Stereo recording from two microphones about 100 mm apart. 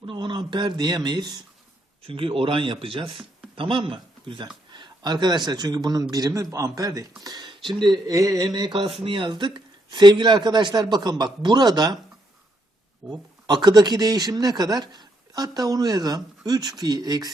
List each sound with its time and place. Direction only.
0.0 s speech: 55° right (ahead or behind)
2.0 s speech: 65° right (ahead or behind); by 8.1 s 50° right (ahead or behind)
8.1 s speech: 35° right (ahead or behind)
8.8 s speech: 60° right (ahead or behind); by 11.9 s 45° right (ahead or behind)
13.0 s speech: 45° right (ahead or behind)